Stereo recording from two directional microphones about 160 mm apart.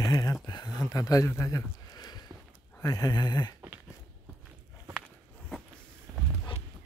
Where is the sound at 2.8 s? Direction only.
20° left (ahead or behind).